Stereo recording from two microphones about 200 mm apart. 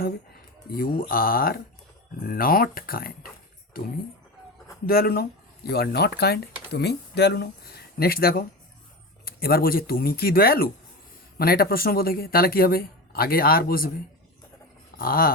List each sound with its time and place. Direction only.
0.8 s speech: 45° left (ahead or behind)
4.9 s speech: 50° left (ahead or behind)
14.9 s a sound: 45° left (ahead or behind)